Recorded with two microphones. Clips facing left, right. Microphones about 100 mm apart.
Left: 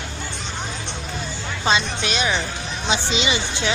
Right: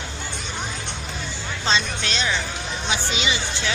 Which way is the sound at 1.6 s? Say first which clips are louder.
Left 3 dB; 10° left (ahead or behind).